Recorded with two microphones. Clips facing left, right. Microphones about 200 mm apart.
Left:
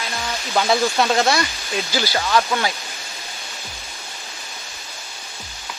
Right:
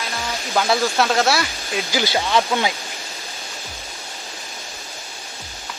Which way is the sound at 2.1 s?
15° right (ahead or behind).